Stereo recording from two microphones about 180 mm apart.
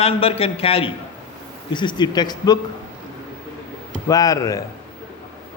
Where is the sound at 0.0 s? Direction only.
30° left (ahead or behind).